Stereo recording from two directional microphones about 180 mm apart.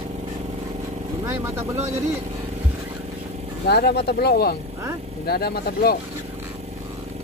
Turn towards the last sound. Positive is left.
turn(degrees=60)  # may be behind; listen again after turning